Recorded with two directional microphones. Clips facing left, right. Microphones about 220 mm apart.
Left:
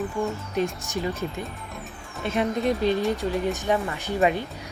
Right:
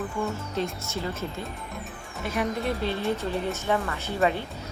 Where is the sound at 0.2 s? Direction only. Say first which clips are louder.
Left 3 dB; 15° left (ahead or behind).